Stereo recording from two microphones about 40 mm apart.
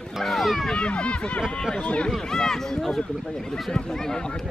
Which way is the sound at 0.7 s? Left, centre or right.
Left.